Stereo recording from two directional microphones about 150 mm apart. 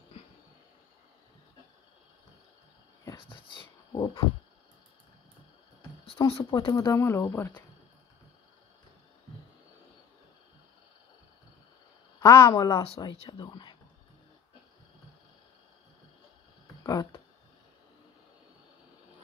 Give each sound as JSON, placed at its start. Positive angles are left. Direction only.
{"t": 3.2, "sound": "speech", "side_deg": 35}
{"t": 6.0, "sound": "speech", "side_deg": 40}
{"t": 6.9, "sound": "speech", "side_deg": 20}
{"t": 12.2, "sound": "speech", "side_deg": 20}
{"t": 13.0, "sound": "speech", "side_deg": 35}
{"t": 16.8, "sound": "speech", "side_deg": 25}